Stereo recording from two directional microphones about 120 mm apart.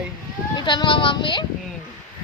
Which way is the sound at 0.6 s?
40° left (ahead or behind).